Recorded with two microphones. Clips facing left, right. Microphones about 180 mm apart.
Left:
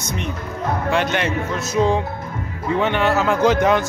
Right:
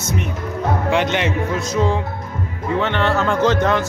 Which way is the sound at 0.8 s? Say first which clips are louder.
Right 1 dB; 15° right (ahead or behind).